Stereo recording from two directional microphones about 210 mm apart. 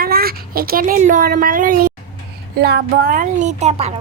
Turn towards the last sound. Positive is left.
turn(degrees=-30)  # may be behind; listen again after turning